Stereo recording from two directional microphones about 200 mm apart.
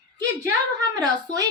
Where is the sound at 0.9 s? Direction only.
20° right (ahead or behind).